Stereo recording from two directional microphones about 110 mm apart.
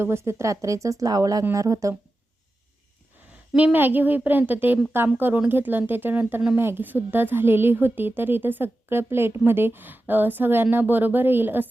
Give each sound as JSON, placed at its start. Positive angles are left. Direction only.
{"t": 0.0, "sound": "a woman's voice", "side_deg": -25}
{"t": 3.5, "sound": "a woman's voice", "side_deg": -15}